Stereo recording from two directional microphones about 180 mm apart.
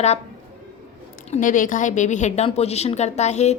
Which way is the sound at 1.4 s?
45° left (ahead or behind).